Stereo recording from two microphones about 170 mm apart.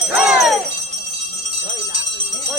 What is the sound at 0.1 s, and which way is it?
Jingle bell, 5° right (ahead or behind).